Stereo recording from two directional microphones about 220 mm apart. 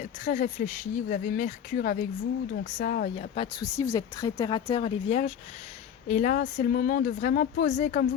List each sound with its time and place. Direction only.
0.3 s speech: 30° left (ahead or behind)
3.2 s speech: 25° left (ahead or behind)
3.8 s speech: 15° left (ahead or behind); by 8.0 s 35° left (ahead or behind)